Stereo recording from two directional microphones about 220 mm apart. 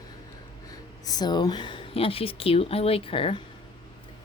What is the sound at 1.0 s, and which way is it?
A woman's voice, 15° left (ahead or behind).